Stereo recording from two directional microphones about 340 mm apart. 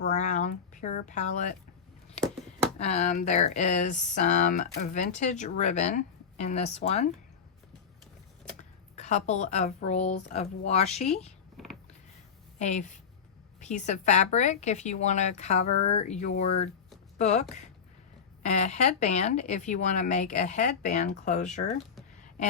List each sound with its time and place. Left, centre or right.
0.0 s a sound: left
2.7 s speech: centre
9.0 s speech: centre
11.5 s a sound: centre
12.5 s speech: centre
18.4 s speech: centre